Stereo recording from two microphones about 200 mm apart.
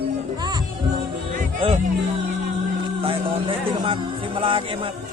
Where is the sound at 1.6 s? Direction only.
25° right (ahead or behind).